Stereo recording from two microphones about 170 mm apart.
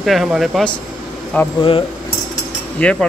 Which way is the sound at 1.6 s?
30° left (ahead or behind).